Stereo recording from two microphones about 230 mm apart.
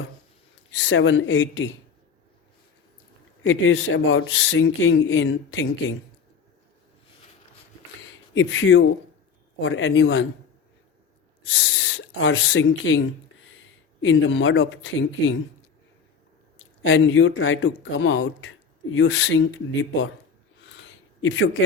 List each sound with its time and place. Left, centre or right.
0.8 s speech: left
3.4 s speech: left
8.4 s speech: left
11.5 s speech: left
16.8 s speech: left
20.6 s a sound: left